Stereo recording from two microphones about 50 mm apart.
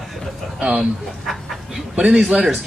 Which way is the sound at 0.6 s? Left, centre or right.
Right.